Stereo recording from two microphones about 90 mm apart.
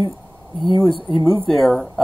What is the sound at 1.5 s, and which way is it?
Speech, centre (ahead or behind).